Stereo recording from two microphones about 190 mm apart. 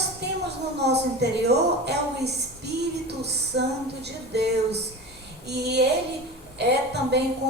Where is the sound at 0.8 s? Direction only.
60° right (ahead or behind).